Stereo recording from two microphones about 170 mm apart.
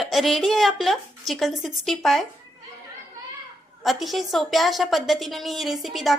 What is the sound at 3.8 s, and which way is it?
A woman's voice, centre (ahead or behind).